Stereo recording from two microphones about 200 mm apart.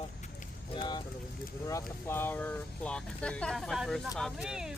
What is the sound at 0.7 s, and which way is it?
Vehicle, 25° left (ahead or behind).